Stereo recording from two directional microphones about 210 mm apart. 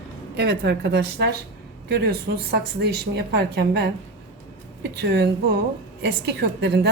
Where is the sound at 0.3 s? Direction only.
50° right (ahead or behind).